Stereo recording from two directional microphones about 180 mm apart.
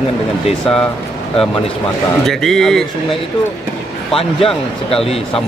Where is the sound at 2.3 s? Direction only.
Centre (ahead or behind).